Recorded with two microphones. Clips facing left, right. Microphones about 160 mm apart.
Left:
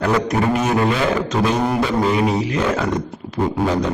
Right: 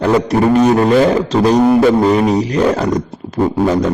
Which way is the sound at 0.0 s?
30° right (ahead or behind).